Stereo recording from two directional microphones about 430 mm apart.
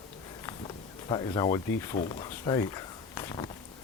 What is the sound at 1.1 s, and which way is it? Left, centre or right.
Speech, centre.